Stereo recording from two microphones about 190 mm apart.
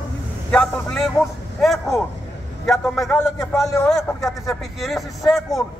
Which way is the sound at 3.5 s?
15° left (ahead or behind).